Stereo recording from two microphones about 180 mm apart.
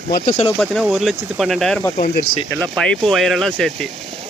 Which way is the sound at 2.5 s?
10° left (ahead or behind).